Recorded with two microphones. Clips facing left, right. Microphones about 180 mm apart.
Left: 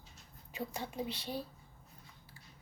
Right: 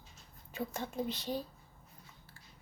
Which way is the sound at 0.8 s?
10° left (ahead or behind).